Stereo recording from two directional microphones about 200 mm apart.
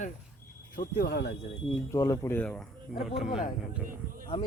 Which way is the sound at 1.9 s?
15° left (ahead or behind).